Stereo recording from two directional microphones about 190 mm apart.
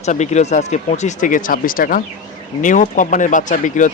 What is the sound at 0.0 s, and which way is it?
Speech, 35° left (ahead or behind).